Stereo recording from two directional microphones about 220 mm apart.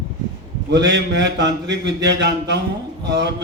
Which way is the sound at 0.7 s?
50° right (ahead or behind).